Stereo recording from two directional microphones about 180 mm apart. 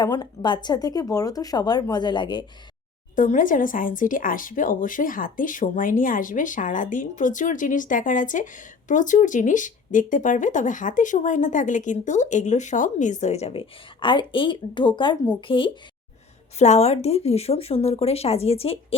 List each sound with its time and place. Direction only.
0.0 s speech: 20° left (ahead or behind)
3.2 s speech: 45° left (ahead or behind); by 15.8 s 30° left (ahead or behind)
16.6 s speech: 40° left (ahead or behind)